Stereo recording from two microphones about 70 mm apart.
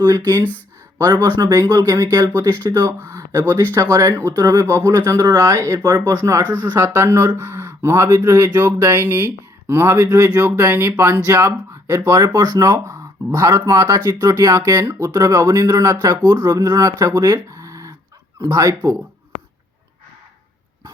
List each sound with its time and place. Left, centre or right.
0.9 s speech: right
3.0 s speech: right
10.3 s speech: right